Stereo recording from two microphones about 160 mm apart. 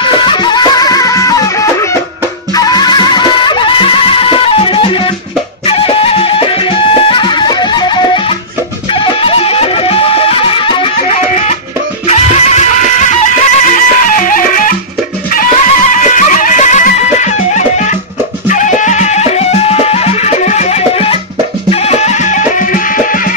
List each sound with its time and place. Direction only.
0.0 s music: 30° left (ahead or behind)
11.1 s music: 45° left (ahead or behind)